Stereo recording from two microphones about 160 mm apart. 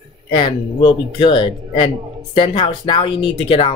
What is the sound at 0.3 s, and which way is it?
Speech, 30° left (ahead or behind).